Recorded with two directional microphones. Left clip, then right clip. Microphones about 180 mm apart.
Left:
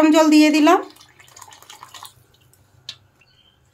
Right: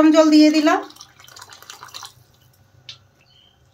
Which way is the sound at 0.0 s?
60° left (ahead or behind).